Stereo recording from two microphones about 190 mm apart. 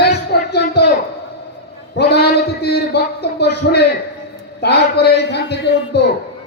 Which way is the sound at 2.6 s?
60° left (ahead or behind).